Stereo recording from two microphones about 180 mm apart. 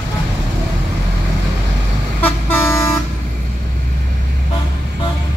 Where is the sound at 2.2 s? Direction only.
10° left (ahead or behind).